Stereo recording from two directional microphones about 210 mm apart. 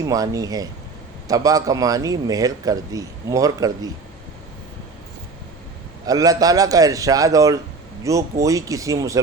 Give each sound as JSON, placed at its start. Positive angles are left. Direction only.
{"t": 0.1, "sound": "speech", "side_deg": -15}
{"t": 6.1, "sound": "speech", "side_deg": -15}